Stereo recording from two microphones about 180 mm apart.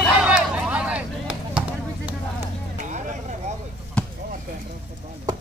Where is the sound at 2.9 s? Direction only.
40° right (ahead or behind).